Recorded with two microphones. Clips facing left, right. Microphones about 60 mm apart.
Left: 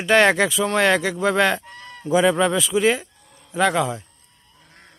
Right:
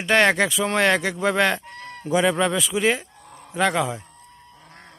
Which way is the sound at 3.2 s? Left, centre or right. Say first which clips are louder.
Right 8 dB; right.